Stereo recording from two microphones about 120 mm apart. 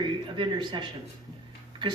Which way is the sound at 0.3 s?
40° right (ahead or behind).